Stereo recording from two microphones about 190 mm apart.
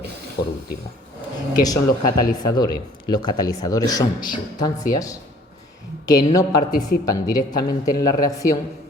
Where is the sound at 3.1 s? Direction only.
20° left (ahead or behind).